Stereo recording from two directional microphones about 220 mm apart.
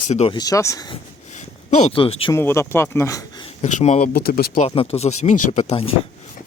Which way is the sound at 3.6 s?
30° left (ahead or behind).